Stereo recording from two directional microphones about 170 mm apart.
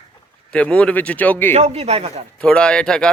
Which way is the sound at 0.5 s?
5° left (ahead or behind).